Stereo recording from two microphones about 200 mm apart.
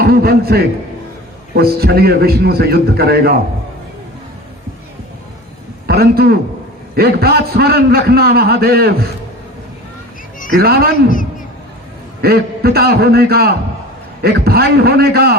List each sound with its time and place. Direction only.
0.0 s a man's voice: 50° right (ahead or behind)
5.9 s a man's voice: 50° right (ahead or behind)
10.6 s a man's voice: 50° right (ahead or behind)
12.2 s a man's voice: 50° right (ahead or behind)